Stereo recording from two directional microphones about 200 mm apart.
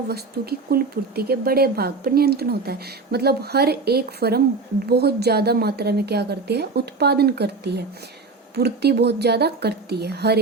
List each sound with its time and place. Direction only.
0.7 s a woman's voice: 50° right (ahead or behind)